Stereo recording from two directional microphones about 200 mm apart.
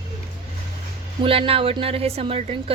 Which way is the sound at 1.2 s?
30° right (ahead or behind).